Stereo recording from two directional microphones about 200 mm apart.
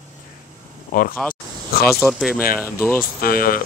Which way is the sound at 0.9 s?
45° left (ahead or behind).